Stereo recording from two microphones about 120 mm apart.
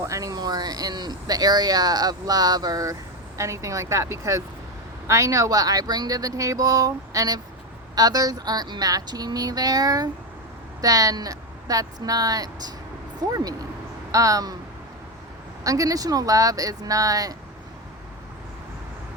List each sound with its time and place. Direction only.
0.0 s speech: 25° right (ahead or behind)
15.6 s speech: 30° right (ahead or behind)